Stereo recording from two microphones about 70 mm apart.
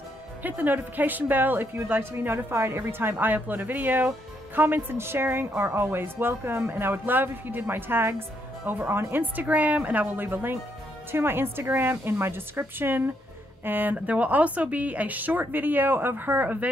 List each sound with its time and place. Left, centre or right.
0.4 s a woman's voice: right